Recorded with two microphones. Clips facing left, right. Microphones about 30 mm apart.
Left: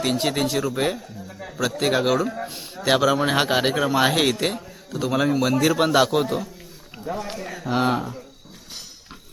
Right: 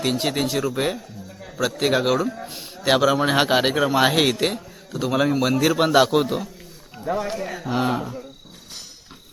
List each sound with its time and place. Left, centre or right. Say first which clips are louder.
0.0 s speech: even; centre
1.3 s a sound: left 3 dB; centre
1.5 s speech: right 1 dB; centre
2.2 s speech: even; centre
2.5 s speech: right 2 dB; centre
7.0 s speech: right 5 dB; centre
7.3 s speech: right 3 dB; centre
7.7 s speech: left 2 dB; centre